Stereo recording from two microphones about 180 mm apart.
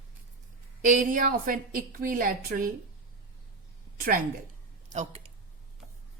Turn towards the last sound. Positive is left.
turn(degrees=-40)  # may be behind; listen again after turning